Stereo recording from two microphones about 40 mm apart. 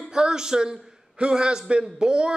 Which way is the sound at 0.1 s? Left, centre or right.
Centre.